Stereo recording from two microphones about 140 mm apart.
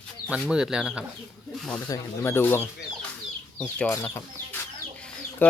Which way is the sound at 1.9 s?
15° left (ahead or behind).